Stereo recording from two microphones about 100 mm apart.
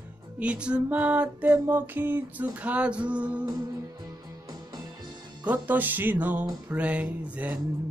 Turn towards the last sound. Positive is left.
turn(degrees=-15)  # may be behind; listen again after turning